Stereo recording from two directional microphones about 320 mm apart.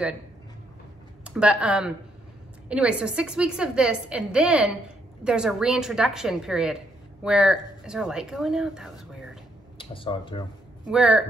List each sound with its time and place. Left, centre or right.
1.2 s a woman's voice: centre
9.8 s speech: centre
10.9 s a woman's voice: centre